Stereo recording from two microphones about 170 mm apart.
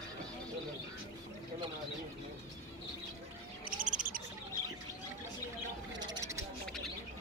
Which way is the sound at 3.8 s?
50° right (ahead or behind).